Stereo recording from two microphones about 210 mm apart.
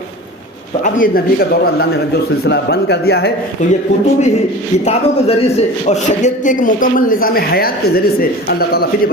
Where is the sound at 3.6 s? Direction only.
35° left (ahead or behind).